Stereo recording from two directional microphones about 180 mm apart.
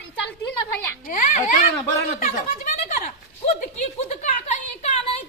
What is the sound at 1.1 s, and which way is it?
Children playing, 50° left (ahead or behind).